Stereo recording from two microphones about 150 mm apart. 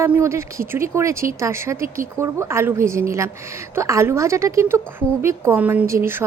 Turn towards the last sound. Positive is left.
turn(degrees=-15)  # may be behind; listen again after turning